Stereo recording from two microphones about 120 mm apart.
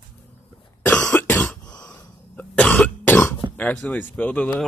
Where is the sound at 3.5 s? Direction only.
10° left (ahead or behind).